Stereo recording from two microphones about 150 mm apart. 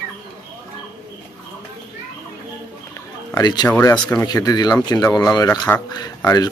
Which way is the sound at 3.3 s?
25° left (ahead or behind).